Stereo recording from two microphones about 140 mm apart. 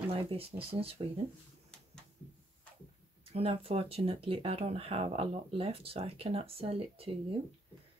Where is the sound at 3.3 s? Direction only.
45° right (ahead or behind).